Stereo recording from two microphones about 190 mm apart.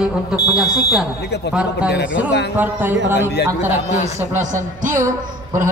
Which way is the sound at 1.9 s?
65° left (ahead or behind).